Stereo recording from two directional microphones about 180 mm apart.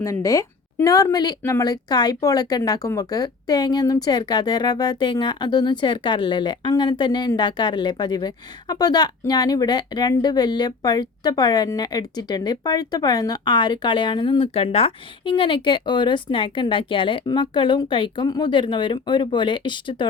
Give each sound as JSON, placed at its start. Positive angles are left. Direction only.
{"t": 0.0, "sound": "speech", "side_deg": 15}